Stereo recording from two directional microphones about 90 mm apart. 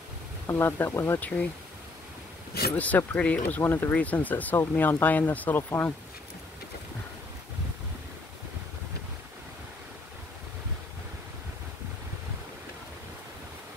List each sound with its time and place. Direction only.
0.5 s speech: 25° left (ahead or behind)
1.2 s speech: 15° left (ahead or behind)
2.7 s speech: 15° left (ahead or behind)